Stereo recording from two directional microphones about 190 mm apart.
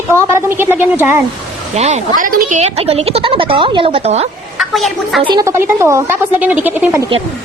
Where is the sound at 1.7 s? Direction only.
35° right (ahead or behind).